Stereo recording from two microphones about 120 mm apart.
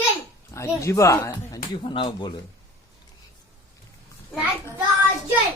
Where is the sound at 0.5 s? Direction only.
25° left (ahead or behind).